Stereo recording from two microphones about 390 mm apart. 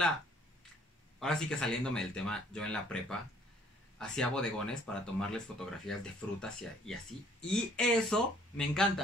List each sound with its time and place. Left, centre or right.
1.2 s speech: centre